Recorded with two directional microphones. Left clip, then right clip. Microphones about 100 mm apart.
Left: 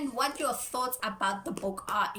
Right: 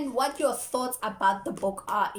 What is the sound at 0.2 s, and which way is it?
A woman's voice, 35° right (ahead or behind).